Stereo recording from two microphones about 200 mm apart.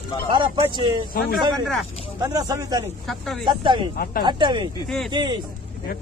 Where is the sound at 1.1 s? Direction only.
50° left (ahead or behind).